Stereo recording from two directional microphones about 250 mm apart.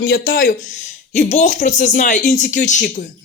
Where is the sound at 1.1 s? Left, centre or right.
Left.